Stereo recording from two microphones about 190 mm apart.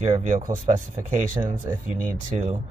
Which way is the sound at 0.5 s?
40° right (ahead or behind).